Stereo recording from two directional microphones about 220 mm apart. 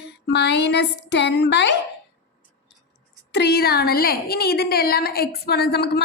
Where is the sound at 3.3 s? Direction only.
50° left (ahead or behind).